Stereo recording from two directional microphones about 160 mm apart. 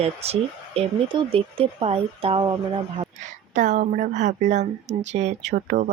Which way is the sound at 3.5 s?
50° right (ahead or behind).